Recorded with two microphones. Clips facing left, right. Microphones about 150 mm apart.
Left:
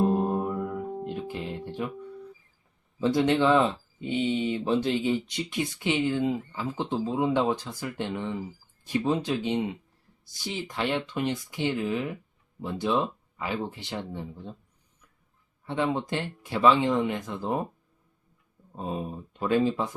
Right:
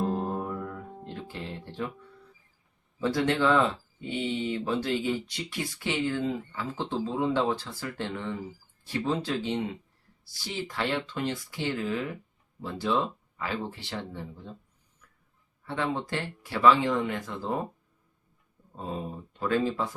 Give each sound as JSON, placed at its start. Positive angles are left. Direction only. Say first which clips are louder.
{"t": 0.0, "sound": "music", "louder": "left 5 dB", "side_deg": 20}
{"t": 3.0, "sound": "speech", "louder": "left 3 dB", "side_deg": 20}
{"t": 15.6, "sound": "speech", "louder": "left 3 dB", "side_deg": 20}
{"t": 18.8, "sound": "speech", "louder": "left 2 dB", "side_deg": 20}